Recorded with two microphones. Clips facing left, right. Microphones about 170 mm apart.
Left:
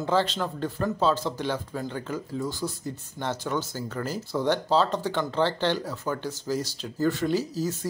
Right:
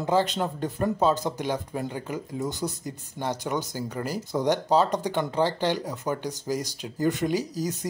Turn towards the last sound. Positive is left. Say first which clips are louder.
# even
turn(degrees=-15)  # may be behind; listen again after turning